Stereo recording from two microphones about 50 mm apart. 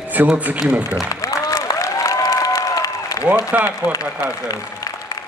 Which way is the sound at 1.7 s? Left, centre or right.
Left.